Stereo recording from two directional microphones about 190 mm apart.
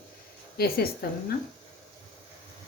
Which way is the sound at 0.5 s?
55° left (ahead or behind).